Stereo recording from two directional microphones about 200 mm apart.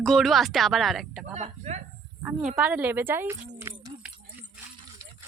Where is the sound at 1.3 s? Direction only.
35° right (ahead or behind).